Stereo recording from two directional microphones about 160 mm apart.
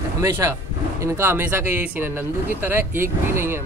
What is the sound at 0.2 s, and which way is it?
Speech, 20° right (ahead or behind).